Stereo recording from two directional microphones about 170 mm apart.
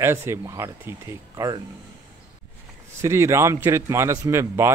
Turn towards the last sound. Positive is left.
turn(degrees=-15)  # may be behind; listen again after turning